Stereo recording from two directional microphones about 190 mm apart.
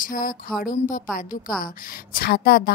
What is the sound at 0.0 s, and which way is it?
Speech, 50° left (ahead or behind).